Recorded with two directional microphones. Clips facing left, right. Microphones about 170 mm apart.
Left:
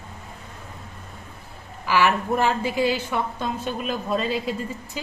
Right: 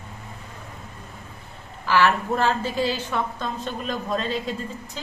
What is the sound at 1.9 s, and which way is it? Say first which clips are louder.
A woman's voice: even; 15° left (ahead or behind).